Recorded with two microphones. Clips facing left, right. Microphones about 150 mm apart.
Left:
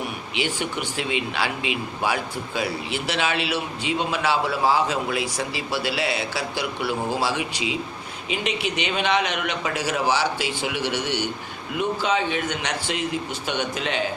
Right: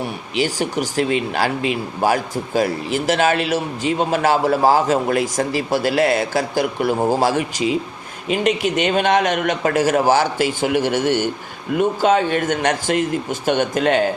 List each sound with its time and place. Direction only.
0.0 s speech: 40° right (ahead or behind)